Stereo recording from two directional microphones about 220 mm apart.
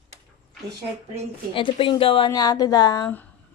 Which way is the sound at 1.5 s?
25° left (ahead or behind).